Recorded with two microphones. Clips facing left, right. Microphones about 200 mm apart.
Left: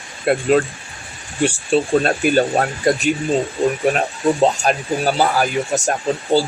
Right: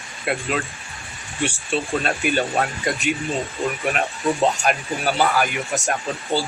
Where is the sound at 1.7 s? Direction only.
40° left (ahead or behind).